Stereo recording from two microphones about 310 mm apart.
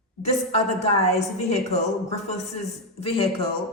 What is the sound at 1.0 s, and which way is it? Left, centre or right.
Speech, left.